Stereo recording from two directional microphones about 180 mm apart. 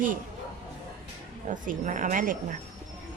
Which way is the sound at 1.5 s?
45° right (ahead or behind).